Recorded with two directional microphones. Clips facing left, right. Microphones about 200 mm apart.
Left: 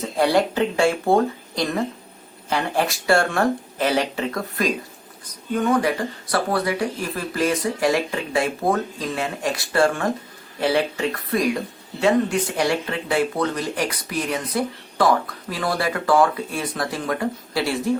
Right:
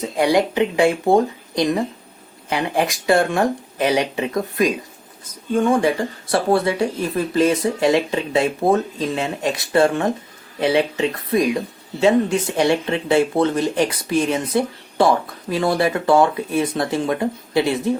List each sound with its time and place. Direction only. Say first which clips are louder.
0.0 s speech: right 2 dB; 15° right (ahead or behind)